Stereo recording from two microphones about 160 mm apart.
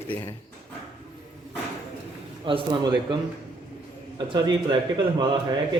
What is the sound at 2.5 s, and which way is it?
Speech, 30° right (ahead or behind).